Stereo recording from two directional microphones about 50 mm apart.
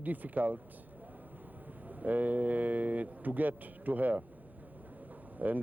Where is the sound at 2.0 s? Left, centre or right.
Right.